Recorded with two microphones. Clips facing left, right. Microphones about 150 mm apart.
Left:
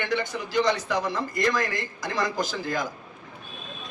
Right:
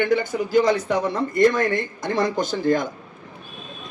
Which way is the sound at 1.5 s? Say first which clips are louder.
Right 6 dB; 90° left.